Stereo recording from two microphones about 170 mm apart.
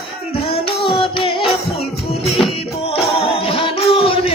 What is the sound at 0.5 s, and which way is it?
Music, 35° left (ahead or behind).